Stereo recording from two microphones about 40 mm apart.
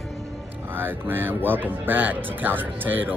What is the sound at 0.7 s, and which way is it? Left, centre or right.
Speech, right.